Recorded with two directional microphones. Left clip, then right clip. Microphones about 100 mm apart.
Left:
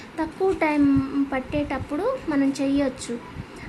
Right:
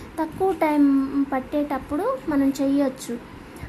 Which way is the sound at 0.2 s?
20° right (ahead or behind).